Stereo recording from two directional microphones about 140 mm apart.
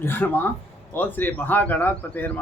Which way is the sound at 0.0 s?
15° left (ahead or behind).